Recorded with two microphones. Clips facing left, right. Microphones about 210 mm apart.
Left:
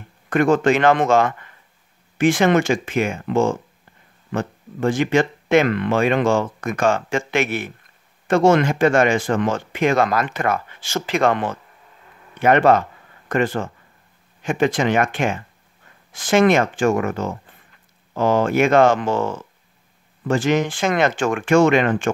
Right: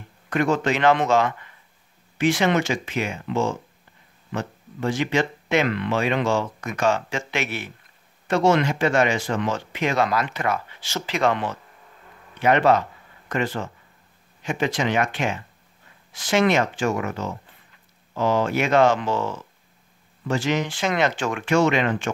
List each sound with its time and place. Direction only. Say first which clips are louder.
0.3 s speech: left 6 dB; 50° left (ahead or behind)